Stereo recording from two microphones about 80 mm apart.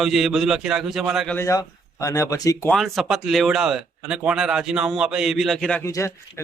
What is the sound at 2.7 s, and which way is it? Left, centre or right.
Speech, centre.